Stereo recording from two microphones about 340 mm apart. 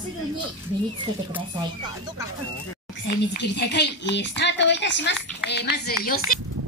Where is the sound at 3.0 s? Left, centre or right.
Left.